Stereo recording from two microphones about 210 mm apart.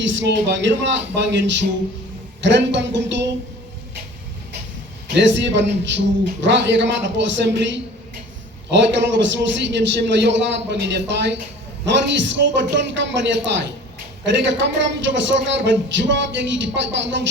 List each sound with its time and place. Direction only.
0.0 s a man's voice: 60° right (ahead or behind)
5.0 s a man's voice: 60° right (ahead or behind)